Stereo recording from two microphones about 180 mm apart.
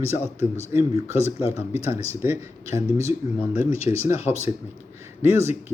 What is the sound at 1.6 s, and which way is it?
Speech, 35° left (ahead or behind).